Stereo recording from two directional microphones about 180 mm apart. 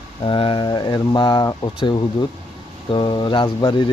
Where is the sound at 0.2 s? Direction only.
30° left (ahead or behind).